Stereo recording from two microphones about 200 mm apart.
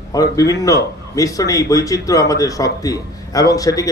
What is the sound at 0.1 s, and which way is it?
A man's voice, 15° left (ahead or behind).